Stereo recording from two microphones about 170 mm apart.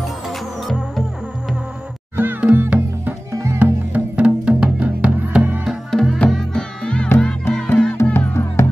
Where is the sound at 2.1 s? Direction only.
10° right (ahead or behind).